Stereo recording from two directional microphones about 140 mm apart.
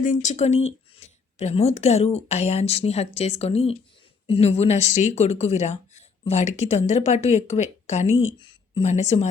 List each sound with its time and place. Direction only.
0.0 s a woman's voice: 65° left (ahead or behind)